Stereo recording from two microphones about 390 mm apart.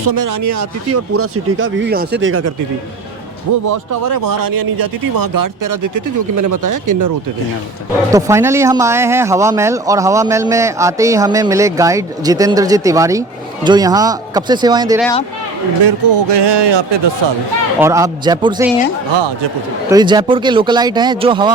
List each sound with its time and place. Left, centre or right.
0.0 s speech: right
3.7 s speech: right
8.1 s speech: centre
15.8 s a man's voice: right
17.7 s speech: centre
19.9 s speech: centre